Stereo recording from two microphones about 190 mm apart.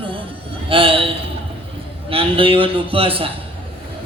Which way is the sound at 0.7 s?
30° right (ahead or behind).